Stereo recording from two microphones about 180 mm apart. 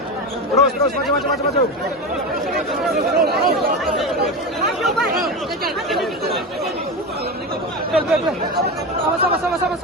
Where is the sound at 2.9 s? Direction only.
60° right (ahead or behind).